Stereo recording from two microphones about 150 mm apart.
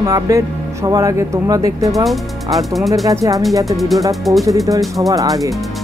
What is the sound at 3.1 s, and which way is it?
Speech, 25° right (ahead or behind).